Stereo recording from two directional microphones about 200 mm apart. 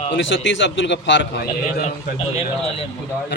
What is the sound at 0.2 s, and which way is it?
A man's voice, 65° left (ahead or behind).